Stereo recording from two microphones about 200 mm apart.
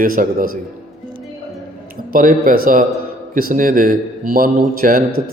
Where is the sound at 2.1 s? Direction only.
45° right (ahead or behind).